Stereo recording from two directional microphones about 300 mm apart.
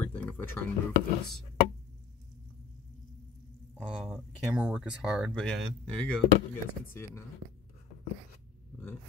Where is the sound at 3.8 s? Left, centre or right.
Centre.